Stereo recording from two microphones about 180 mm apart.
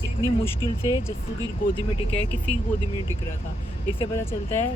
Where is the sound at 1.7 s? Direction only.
35° left (ahead or behind).